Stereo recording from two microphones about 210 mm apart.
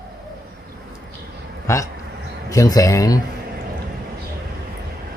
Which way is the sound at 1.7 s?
15° left (ahead or behind).